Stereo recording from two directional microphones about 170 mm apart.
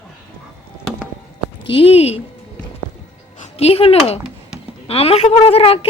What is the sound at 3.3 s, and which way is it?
Speech, 40° left (ahead or behind).